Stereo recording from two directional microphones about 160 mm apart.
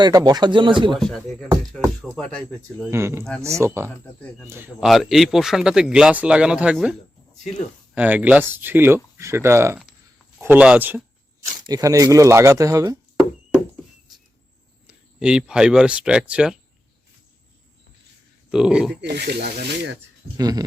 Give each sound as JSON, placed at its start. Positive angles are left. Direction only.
{"t": 0.0, "sound": "speech", "side_deg": -25}
{"t": 0.9, "sound": "speech", "side_deg": 0}
{"t": 2.9, "sound": "speech", "side_deg": -15}
{"t": 4.2, "sound": "speech", "side_deg": 10}
{"t": 4.4, "sound": "speech", "side_deg": -15}
{"t": 4.8, "sound": "speech", "side_deg": 0}
{"t": 7.9, "sound": "speech", "side_deg": -10}
{"t": 11.6, "sound": "speech", "side_deg": -20}
{"t": 14.8, "sound": "speech", "side_deg": -5}
{"t": 18.5, "sound": "speech", "side_deg": -5}
{"t": 19.0, "sound": "speech", "side_deg": -90}
{"t": 20.3, "sound": "speech", "side_deg": -25}